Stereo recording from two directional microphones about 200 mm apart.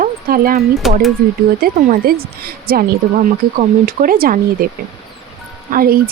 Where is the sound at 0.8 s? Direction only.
Centre (ahead or behind).